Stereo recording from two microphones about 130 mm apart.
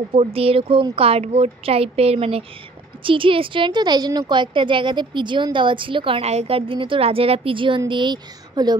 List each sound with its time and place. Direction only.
0.1 s a woman's voice: 45° right (ahead or behind)